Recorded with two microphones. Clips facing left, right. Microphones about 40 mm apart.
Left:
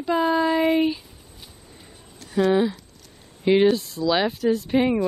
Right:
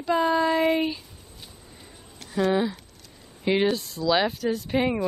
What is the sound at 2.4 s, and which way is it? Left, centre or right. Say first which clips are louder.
Speech: left 3 dB; centre.